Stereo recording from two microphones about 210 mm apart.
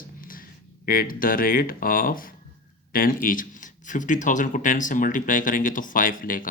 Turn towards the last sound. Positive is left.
turn(degrees=40)  # may be behind; listen again after turning